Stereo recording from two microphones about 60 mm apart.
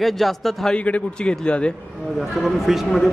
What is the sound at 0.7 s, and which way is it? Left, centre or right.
A man's voice, centre.